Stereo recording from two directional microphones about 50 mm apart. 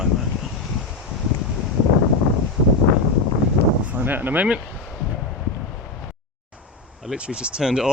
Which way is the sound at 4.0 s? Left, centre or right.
Right.